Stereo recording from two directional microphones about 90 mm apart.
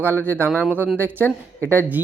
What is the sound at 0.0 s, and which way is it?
Speech, 25° right (ahead or behind).